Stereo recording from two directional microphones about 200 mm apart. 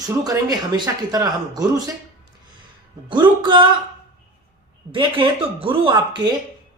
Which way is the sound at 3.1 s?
25° right (ahead or behind).